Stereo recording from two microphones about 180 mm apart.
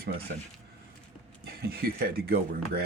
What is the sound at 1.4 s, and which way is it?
Speech, 60° right (ahead or behind).